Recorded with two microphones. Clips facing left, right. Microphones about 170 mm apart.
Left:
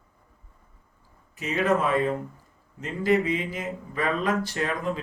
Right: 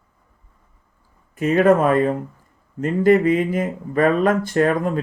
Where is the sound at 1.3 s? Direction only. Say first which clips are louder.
Right 9 dB; 50° right (ahead or behind).